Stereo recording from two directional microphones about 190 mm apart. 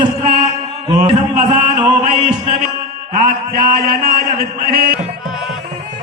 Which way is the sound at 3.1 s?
50° right (ahead or behind).